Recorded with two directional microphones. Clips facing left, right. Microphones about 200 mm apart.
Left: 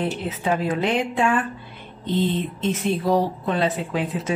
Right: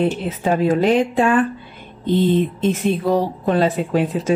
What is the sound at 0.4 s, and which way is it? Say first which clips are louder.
Speech: right 6 dB; 45° right (ahead or behind).